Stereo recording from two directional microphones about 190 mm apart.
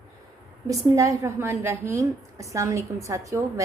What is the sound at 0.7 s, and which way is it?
A woman's voice, 15° right (ahead or behind).